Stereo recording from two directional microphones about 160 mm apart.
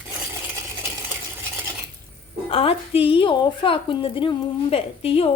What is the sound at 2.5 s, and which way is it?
A woman's voice, 35° left (ahead or behind).